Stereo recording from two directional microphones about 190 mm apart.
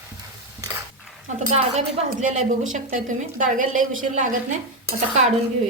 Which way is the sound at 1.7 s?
35° right (ahead or behind).